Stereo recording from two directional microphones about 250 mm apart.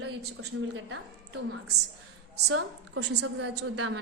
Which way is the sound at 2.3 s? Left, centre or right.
Right.